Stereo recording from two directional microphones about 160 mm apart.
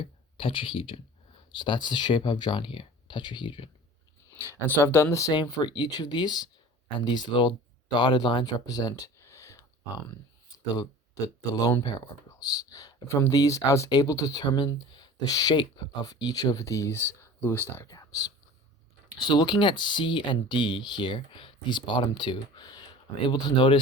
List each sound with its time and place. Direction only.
0.0 s speech: 35° left (ahead or behind)
4.4 s speech: 15° left (ahead or behind)
10.8 s speech: 20° left (ahead or behind)
19.2 s speech: 30° left (ahead or behind)